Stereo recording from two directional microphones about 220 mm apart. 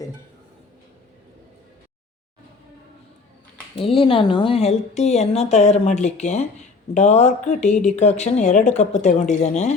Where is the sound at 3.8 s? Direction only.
25° left (ahead or behind).